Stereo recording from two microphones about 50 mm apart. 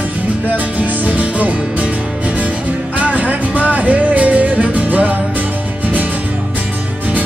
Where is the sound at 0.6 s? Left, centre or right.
Right.